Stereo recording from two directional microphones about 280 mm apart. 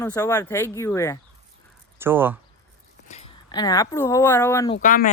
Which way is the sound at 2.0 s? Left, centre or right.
Centre.